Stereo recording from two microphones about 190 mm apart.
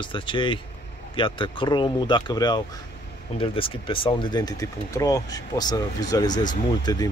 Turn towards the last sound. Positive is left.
turn(degrees=20)  # may be behind; listen again after turning